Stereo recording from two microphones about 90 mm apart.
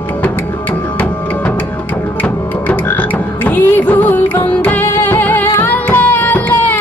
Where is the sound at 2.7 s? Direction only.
20° left (ahead or behind).